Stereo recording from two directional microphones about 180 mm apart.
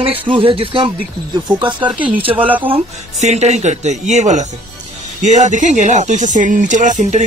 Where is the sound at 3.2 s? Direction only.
40° right (ahead or behind).